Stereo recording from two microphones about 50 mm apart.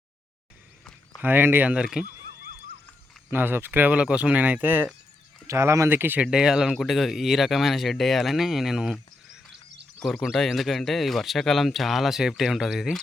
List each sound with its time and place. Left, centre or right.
1.2 s speech: right
1.6 s speech: centre
3.3 s speech: right
3.7 s speech: right
4.0 s speech: right
5.5 s speech: right
5.9 s speech: right
6.2 s speech: centre
10.0 s speech: centre